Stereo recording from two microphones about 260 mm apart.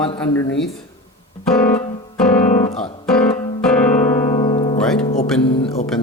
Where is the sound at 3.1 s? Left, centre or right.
Centre.